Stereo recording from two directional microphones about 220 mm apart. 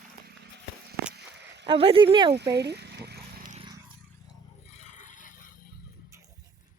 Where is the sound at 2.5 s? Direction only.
50° right (ahead or behind).